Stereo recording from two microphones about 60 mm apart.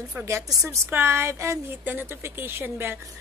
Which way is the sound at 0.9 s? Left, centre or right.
Right.